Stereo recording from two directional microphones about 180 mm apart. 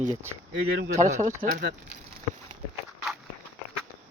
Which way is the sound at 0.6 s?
60° right (ahead or behind).